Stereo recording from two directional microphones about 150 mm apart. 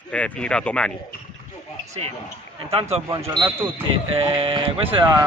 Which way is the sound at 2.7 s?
40° right (ahead or behind).